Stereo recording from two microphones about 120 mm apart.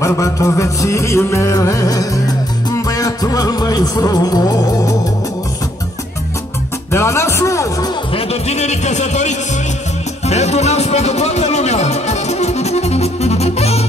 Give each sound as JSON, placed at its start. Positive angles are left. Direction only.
{"t": 0.0, "sound": "music", "side_deg": 25}
{"t": 6.9, "sound": "music", "side_deg": 25}
{"t": 8.1, "sound": "a man's voice", "side_deg": 60}
{"t": 10.2, "sound": "speech", "side_deg": 65}